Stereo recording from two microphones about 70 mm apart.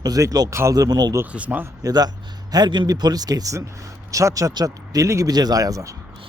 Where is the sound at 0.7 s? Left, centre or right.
Right.